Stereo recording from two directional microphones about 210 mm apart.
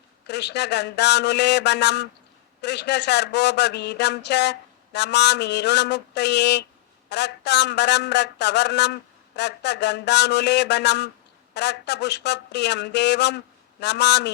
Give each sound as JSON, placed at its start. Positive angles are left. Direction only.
{"t": 0.3, "sound": "a man's voice", "side_deg": 55}